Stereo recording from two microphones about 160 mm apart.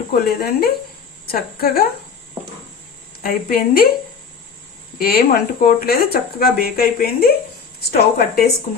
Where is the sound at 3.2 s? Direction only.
65° left (ahead or behind).